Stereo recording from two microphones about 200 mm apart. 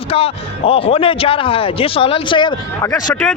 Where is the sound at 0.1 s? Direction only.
30° left (ahead or behind).